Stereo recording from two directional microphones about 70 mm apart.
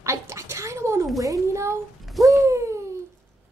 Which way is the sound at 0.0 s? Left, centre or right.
Right.